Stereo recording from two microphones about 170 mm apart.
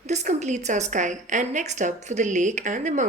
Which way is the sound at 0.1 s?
45° right (ahead or behind).